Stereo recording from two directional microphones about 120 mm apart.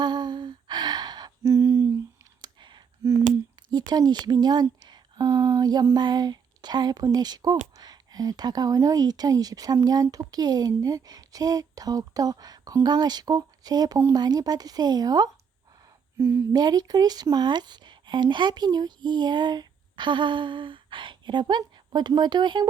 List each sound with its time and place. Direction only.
0.0 s a sound: 35° right (ahead or behind)
1.5 s a sound: 25° right (ahead or behind)
2.4 s clicking: 40° right (ahead or behind)
3.7 s speech: 35° right (ahead or behind)
16.1 s a woman's voice: 20° right (ahead or behind)
16.6 s speech: 35° right (ahead or behind)